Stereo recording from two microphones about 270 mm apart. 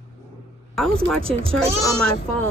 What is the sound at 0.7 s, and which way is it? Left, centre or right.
Speech, centre.